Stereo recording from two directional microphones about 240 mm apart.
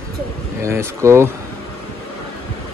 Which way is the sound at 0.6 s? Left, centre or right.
Centre.